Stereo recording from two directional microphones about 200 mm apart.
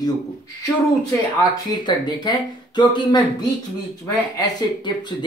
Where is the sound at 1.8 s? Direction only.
20° left (ahead or behind).